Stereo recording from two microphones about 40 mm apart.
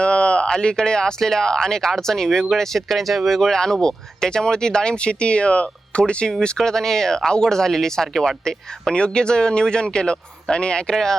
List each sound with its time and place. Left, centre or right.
0.0 s a sound: left
0.5 s speech: centre
6.6 s speech: centre
10.9 s speech: centre